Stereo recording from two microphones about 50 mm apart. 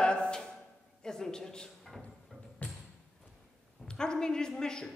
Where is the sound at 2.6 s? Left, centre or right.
Left.